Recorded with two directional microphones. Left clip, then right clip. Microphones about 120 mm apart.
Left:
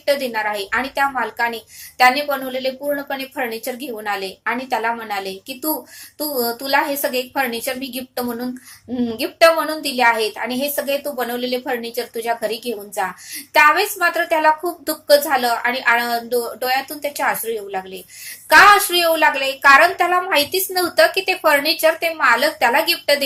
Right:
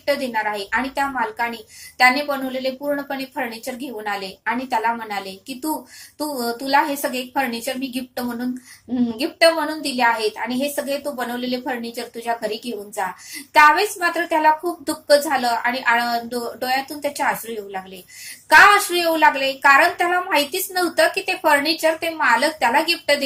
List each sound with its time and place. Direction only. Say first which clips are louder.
0.0 s a woman's voice: left 2 dB; 20° left (ahead or behind)